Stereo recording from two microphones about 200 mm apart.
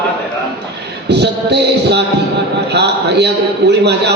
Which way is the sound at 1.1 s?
55° right (ahead or behind).